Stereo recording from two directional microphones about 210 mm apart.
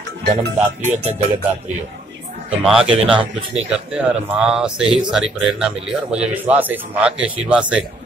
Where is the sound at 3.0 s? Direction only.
25° right (ahead or behind).